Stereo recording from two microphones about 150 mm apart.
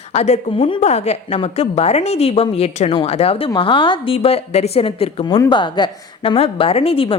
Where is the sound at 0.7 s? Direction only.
50° left (ahead or behind).